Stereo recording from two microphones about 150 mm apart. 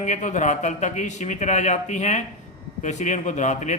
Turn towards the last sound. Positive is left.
turn(degrees=50)  # may be behind; listen again after turning